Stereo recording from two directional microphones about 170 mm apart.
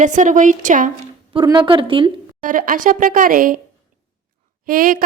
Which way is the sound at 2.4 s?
50° right (ahead or behind).